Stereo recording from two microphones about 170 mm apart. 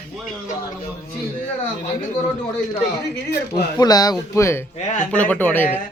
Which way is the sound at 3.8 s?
20° left (ahead or behind).